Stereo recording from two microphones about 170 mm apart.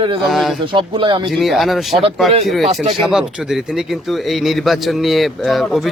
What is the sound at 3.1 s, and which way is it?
Speech, 5° right (ahead or behind).